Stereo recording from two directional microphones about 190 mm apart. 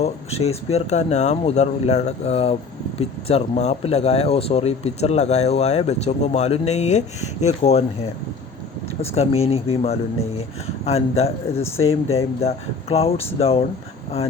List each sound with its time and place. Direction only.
0.0 s speech: 35° left (ahead or behind)
9.0 s speech: 35° left (ahead or behind)